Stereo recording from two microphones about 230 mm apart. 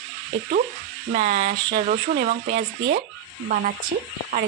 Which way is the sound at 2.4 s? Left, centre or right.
Right.